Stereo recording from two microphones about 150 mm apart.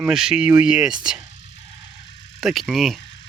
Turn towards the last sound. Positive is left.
turn(degrees=0)  # may be behind; listen again after turning